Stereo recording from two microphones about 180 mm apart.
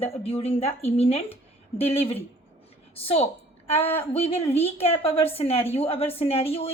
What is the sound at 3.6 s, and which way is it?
A woman's voice, 35° left (ahead or behind).